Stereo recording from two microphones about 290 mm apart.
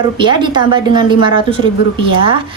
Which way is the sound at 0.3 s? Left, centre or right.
Centre.